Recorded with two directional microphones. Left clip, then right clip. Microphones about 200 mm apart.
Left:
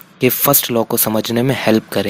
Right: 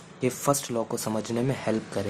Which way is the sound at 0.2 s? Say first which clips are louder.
Left 11 dB; 30° left (ahead or behind).